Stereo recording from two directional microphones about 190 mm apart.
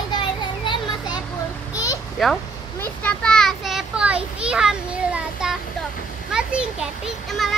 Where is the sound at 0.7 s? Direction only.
20° left (ahead or behind).